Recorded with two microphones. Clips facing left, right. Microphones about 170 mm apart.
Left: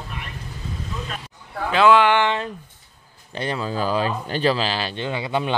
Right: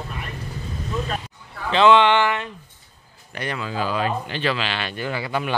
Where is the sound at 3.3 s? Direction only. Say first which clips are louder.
Left 2 dB; 30° left (ahead or behind).